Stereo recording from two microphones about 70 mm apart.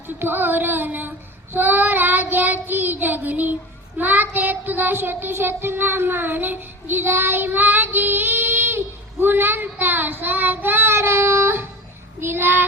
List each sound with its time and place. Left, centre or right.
0.2 s child singing: right